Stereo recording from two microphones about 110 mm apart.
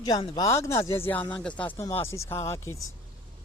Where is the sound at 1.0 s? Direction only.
15° left (ahead or behind).